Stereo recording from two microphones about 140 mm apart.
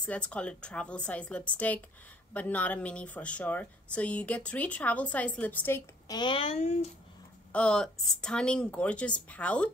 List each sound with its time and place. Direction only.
0.0 s a woman's voice: 10° left (ahead or behind)
6.1 s a child's voice: 35° left (ahead or behind); by 6.9 s 50° left (ahead or behind)
7.5 s a woman's voice: 5° left (ahead or behind)